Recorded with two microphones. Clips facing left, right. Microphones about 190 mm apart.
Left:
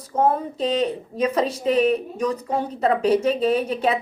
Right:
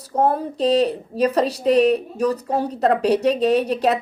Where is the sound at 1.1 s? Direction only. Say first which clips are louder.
Right 4 dB; 30° right (ahead or behind).